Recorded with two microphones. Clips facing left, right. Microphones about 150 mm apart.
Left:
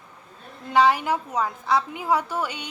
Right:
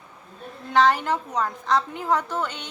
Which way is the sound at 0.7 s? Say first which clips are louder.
Even; 10° left (ahead or behind).